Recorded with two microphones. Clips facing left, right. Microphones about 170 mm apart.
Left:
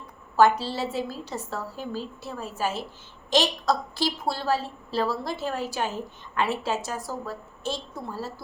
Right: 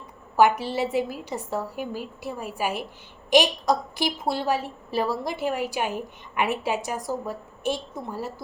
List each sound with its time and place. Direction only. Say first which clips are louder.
0.3 s a woman's voice: right 1 dB; 15° right (ahead or behind)